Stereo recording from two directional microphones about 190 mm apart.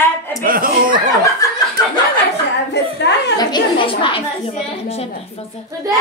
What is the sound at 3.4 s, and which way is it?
A woman's voice, 25° left (ahead or behind).